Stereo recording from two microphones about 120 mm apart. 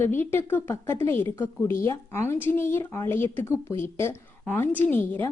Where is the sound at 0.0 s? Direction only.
20° left (ahead or behind).